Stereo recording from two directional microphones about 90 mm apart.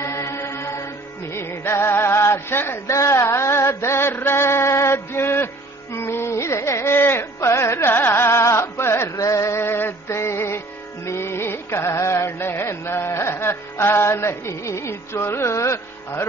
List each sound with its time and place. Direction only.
0.0 s mantra: 30° left (ahead or behind)
1.3 s music: 25° left (ahead or behind)